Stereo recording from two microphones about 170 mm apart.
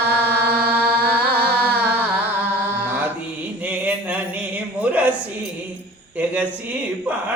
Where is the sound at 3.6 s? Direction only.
10° right (ahead or behind).